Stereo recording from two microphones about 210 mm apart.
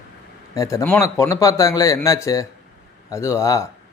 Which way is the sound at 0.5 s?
15° left (ahead or behind).